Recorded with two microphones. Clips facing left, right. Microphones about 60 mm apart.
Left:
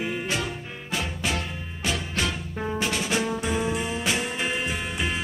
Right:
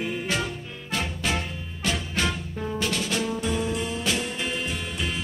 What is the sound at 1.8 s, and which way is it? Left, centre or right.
Music, centre.